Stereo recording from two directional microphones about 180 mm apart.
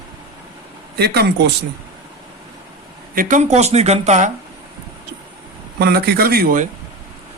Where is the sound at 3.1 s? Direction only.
50° right (ahead or behind).